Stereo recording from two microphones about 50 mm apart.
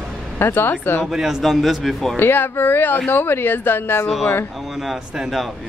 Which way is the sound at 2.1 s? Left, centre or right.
Left.